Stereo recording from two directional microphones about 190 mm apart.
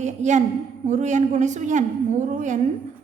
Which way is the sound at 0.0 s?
40° right (ahead or behind).